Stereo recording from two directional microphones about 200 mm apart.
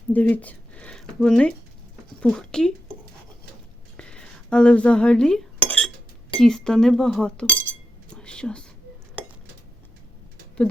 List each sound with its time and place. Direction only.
0.1 s speech: 10° left (ahead or behind)
3.9 s cutlery: 5° left (ahead or behind)
6.4 s speech: 5° left (ahead or behind)
8.1 s whispering: 5° left (ahead or behind)